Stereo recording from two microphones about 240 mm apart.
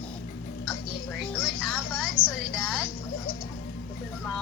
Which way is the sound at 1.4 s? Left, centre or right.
Centre.